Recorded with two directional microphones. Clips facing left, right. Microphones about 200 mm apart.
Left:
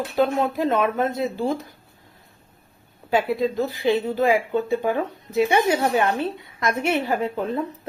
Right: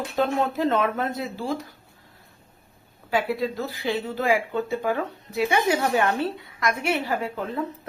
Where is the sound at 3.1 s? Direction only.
20° left (ahead or behind).